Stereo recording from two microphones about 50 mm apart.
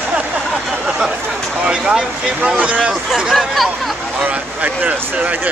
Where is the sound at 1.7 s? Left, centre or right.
Centre.